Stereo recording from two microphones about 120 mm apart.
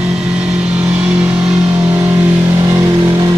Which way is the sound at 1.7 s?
25° right (ahead or behind).